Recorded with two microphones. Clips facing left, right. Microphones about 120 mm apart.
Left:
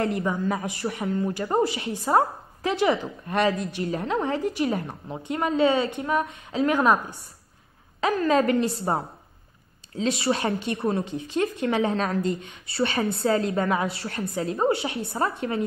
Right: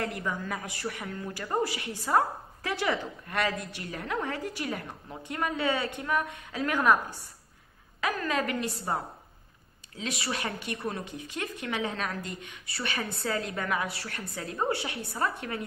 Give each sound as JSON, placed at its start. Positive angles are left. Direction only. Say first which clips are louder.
{"t": 0.0, "sound": "a woman's voice", "louder": "left 8 dB", "side_deg": 25}